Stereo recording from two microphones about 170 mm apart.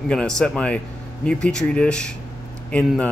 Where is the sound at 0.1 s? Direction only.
5° left (ahead or behind).